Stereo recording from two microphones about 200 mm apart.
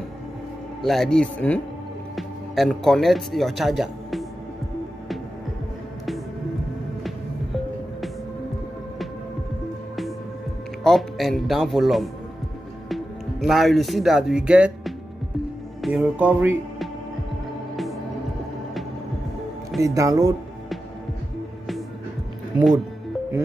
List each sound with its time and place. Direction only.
0.8 s speech: centre (ahead or behind)
10.8 s speech: centre (ahead or behind)
19.8 s speech: 15° right (ahead or behind)